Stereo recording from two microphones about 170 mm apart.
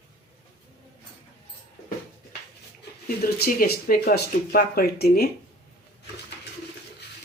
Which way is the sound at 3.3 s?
60° left (ahead or behind).